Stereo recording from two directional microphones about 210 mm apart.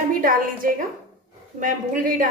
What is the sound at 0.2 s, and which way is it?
A woman's voice, 40° right (ahead or behind).